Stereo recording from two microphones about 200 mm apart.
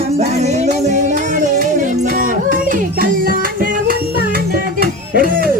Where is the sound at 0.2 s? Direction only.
35° right (ahead or behind).